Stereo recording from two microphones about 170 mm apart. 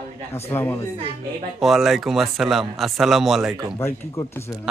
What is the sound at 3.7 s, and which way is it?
Speech, 15° left (ahead or behind).